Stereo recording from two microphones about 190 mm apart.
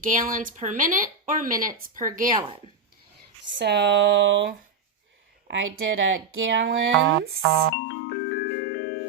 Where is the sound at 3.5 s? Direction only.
65° right (ahead or behind).